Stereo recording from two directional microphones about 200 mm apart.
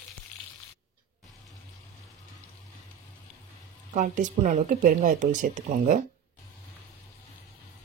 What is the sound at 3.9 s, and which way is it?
Speech, 40° right (ahead or behind).